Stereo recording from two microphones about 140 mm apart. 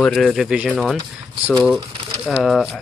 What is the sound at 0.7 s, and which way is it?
Speech, 5° left (ahead or behind).